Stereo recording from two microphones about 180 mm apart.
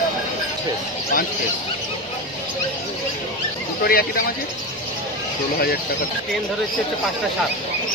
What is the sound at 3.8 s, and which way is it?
Speech, 55° left (ahead or behind).